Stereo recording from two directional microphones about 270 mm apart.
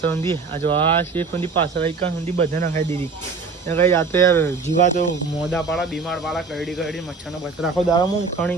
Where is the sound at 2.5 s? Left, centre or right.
Right.